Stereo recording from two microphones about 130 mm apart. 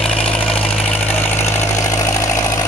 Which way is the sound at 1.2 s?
15° left (ahead or behind).